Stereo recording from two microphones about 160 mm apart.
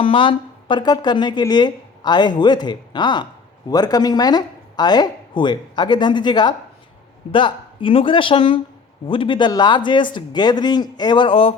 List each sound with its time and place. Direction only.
0.0 s speech: 35° left (ahead or behind)